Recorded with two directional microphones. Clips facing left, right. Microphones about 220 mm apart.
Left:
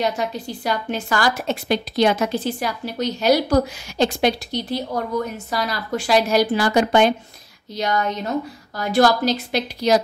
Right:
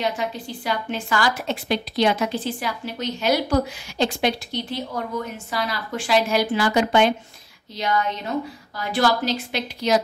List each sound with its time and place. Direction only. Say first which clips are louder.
0.2 s a woman's voice: left 3 dB; 40° left (ahead or behind)